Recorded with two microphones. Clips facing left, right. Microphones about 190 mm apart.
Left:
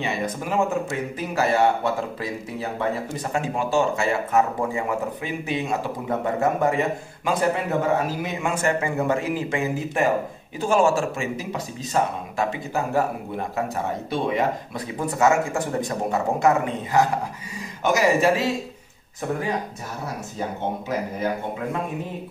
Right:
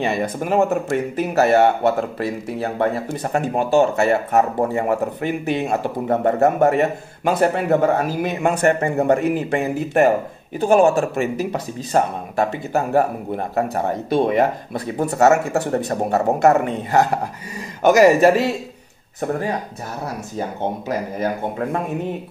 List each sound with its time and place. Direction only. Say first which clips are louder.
0.0 s speech: right 5 dB; 55° right (ahead or behind)
4.4 s speech: right 4 dB; 40° right (ahead or behind)
4.8 s speech: right 6 dB; 60° right (ahead or behind); by 6.7 s 45° right (ahead or behind)
6.7 s a man's voice: right 5 dB; 65° right (ahead or behind)
17.8 s speech: right 7 dB; 50° right (ahead or behind)